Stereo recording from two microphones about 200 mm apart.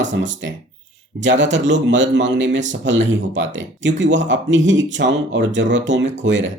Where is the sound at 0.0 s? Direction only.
65° right (ahead or behind).